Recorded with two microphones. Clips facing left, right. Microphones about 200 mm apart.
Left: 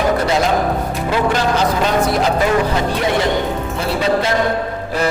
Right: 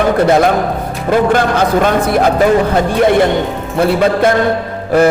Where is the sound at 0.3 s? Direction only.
55° right (ahead or behind).